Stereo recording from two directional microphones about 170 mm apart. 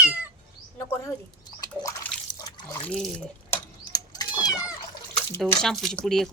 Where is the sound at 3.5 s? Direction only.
20° left (ahead or behind).